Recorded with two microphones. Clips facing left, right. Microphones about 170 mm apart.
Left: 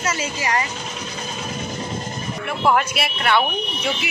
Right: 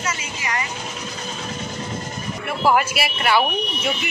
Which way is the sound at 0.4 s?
35° left (ahead or behind).